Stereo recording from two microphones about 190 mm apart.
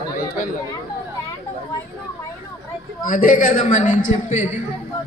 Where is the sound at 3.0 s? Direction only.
45° left (ahead or behind).